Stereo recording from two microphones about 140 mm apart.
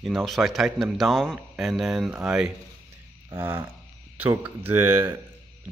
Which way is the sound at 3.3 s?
15° right (ahead or behind).